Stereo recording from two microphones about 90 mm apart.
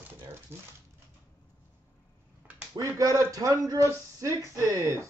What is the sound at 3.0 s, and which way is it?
Speech, 40° right (ahead or behind).